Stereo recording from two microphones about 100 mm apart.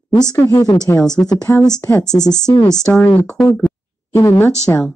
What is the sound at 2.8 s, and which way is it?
Speech, 10° left (ahead or behind).